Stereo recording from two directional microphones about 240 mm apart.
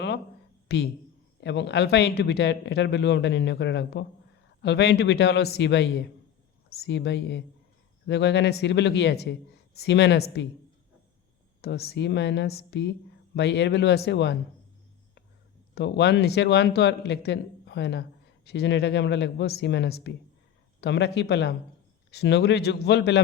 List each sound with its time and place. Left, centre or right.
0.7 s speech: left
11.6 s speech: left
15.7 s speech: left